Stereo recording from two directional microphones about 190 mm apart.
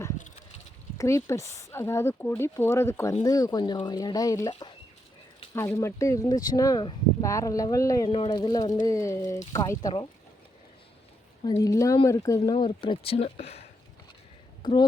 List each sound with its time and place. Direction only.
0.2 s a sound: 40° left (ahead or behind)
0.9 s speech: 15° left (ahead or behind)
11.4 s speech: 15° left (ahead or behind); by 13.6 s 35° left (ahead or behind)
14.6 s speech: 20° left (ahead or behind)